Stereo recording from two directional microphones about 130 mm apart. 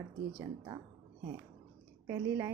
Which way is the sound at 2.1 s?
20° right (ahead or behind).